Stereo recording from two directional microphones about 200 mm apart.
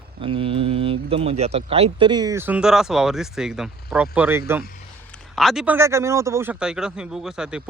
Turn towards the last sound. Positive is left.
turn(degrees=-5)  # may be behind; listen again after turning